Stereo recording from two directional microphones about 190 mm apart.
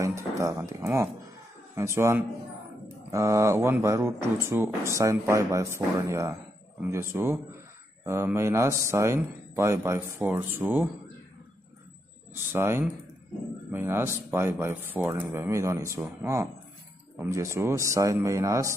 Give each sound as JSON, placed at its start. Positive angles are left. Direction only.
{"t": 0.0, "sound": "speech", "side_deg": -15}
{"t": 12.5, "sound": "speech", "side_deg": -10}